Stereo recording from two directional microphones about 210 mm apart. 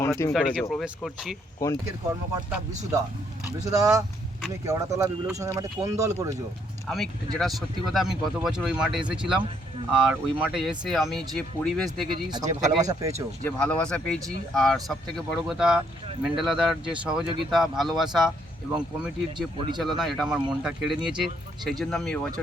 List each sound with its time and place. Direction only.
0.0 s speech: 15° left (ahead or behind)
0.7 s speech: centre (ahead or behind)
1.6 s speech: 15° left (ahead or behind)
2.3 s speech: 15° right (ahead or behind)
6.8 s speech: centre (ahead or behind)
12.1 s speech: 20° right (ahead or behind)
13.4 s speech: 5° left (ahead or behind)